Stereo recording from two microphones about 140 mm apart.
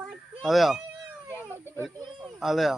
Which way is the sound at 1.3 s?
15° right (ahead or behind).